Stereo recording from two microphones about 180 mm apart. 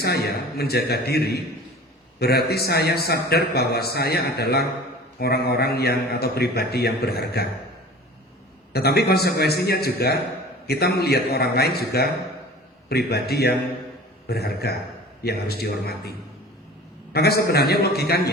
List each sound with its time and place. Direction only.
0.0 s a man's voice: 60° left (ahead or behind)
8.7 s a man's voice: 60° left (ahead or behind)